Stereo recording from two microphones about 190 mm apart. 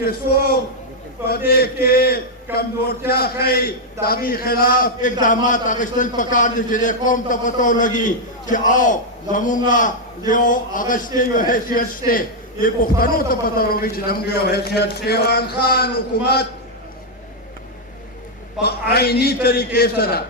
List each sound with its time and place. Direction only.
0.0 s a man's voice: 55° left (ahead or behind)
18.6 s a man's voice: 55° left (ahead or behind)